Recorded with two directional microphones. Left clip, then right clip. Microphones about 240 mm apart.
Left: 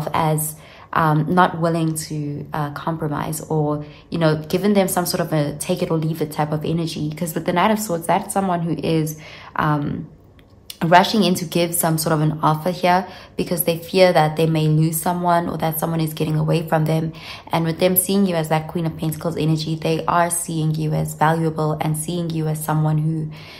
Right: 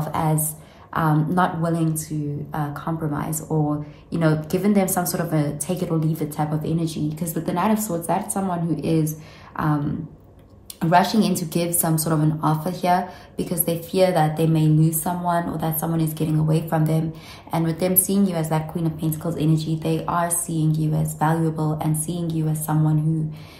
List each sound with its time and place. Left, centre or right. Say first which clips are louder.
0.1 s a woman's voice: left 5 dB; left
10.8 s a woman's voice: left 4 dB; left